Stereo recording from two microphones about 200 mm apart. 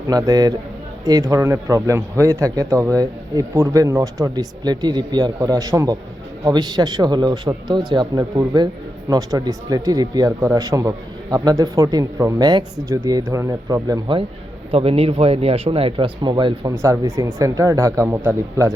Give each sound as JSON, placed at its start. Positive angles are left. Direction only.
{"t": 0.1, "sound": "speech", "side_deg": -20}